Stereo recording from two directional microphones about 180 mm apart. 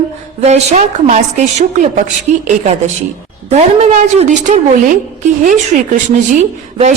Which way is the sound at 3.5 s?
40° right (ahead or behind).